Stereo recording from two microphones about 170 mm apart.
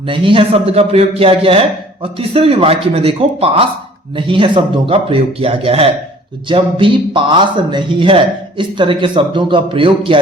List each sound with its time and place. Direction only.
0.1 s a man's voice: 30° right (ahead or behind)